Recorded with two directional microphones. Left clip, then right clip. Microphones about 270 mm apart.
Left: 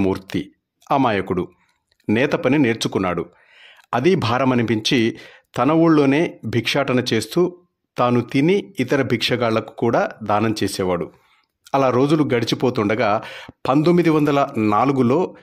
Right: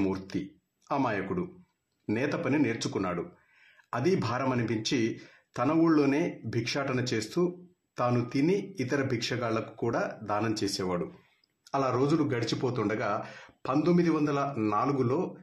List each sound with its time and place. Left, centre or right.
0.0 s speech: left